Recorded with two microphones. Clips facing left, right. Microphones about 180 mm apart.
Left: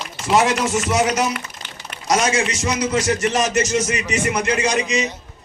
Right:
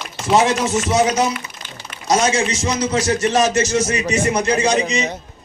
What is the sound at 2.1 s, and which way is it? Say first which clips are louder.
A man's voice: right 2 dB; 30° right (ahead or behind).